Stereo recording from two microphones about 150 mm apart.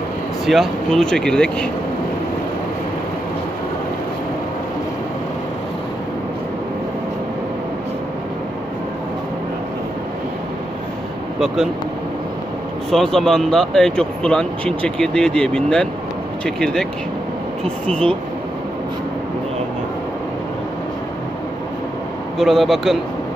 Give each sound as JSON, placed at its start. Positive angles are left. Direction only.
{"t": 0.5, "sound": "speech", "side_deg": 0}
{"t": 11.3, "sound": "speech", "side_deg": 0}
{"t": 12.9, "sound": "speech", "side_deg": 5}
{"t": 17.8, "sound": "speech", "side_deg": 5}
{"t": 22.4, "sound": "speech", "side_deg": 0}